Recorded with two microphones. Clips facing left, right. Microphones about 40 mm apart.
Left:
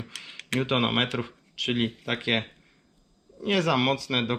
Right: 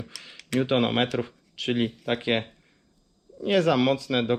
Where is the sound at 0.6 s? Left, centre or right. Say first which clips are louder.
Right 2 dB; left.